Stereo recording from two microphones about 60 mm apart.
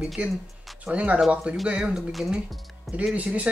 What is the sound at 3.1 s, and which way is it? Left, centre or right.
Speech, right.